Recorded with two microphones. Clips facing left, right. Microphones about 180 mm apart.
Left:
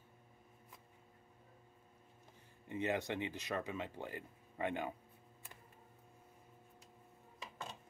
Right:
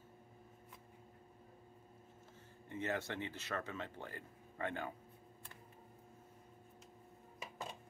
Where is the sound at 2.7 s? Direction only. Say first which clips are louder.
Left 3 dB; 15° left (ahead or behind).